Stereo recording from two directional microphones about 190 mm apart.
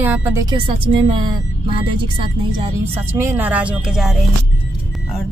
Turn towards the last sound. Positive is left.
turn(degrees=-5)  # may be behind; listen again after turning